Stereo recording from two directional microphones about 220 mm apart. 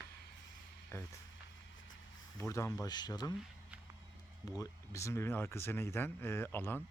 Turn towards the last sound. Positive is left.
turn(degrees=10)  # may be behind; listen again after turning